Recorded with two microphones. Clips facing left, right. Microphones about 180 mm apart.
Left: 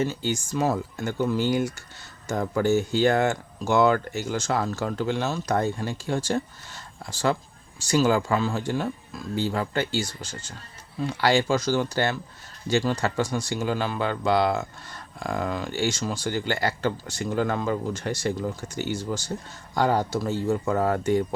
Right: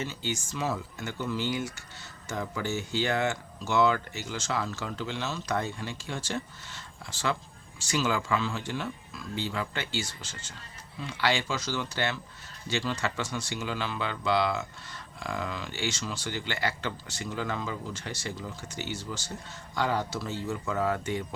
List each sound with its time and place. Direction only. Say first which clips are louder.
0.0 s speech: left 8 dB; 45° left (ahead or behind)